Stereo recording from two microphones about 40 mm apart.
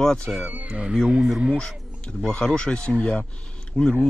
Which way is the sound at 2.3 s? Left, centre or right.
Left.